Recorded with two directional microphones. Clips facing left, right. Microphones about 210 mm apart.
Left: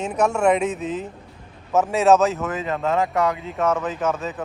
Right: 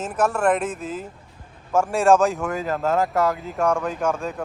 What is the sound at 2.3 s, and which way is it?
Speech, centre (ahead or behind).